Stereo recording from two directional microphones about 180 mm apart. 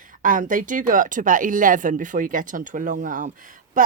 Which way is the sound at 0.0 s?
45° right (ahead or behind).